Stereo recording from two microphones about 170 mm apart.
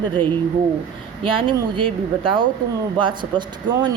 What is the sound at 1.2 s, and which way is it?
Speech, 30° right (ahead or behind).